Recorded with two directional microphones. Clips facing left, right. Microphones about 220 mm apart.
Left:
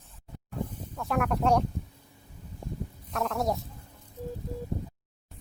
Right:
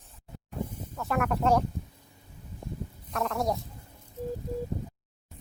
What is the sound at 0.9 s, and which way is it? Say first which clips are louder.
Speech: even; centre (ahead or behind).